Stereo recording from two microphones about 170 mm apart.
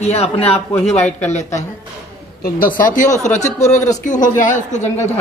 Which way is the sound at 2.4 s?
55° left (ahead or behind).